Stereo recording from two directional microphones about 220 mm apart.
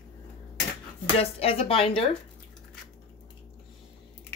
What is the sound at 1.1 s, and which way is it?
Speech, 25° left (ahead or behind).